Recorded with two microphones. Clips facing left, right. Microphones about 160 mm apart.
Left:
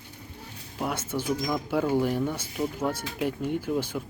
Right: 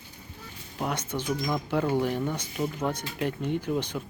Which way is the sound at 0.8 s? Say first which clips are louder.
Left 1 dB; 5° left (ahead or behind).